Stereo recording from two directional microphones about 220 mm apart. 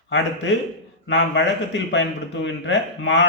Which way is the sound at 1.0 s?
55° left (ahead or behind).